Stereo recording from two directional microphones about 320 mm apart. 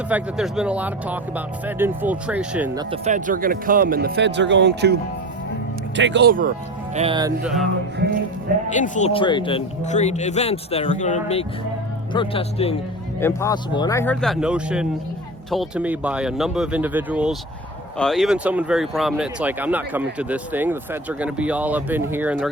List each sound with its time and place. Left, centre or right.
0.1 s speech: centre
2.9 s speech: right
6.0 s speech: right
6.9 s speech: centre
8.7 s speech: left; by 22.5 s centre